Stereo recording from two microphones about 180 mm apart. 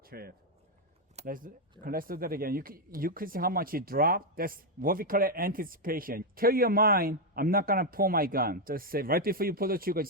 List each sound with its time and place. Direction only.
0.0 s speech: 55° right (ahead or behind)